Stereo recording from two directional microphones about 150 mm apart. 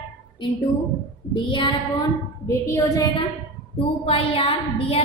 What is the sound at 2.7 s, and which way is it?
Speech, 20° left (ahead or behind).